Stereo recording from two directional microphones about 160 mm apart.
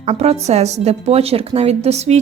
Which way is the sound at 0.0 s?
40° right (ahead or behind).